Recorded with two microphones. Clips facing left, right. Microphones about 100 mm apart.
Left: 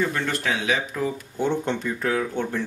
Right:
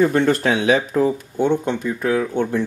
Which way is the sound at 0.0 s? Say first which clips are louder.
Right 9 dB; 35° right (ahead or behind).